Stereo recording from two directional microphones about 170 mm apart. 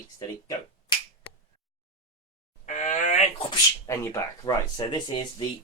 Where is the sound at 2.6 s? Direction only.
45° left (ahead or behind).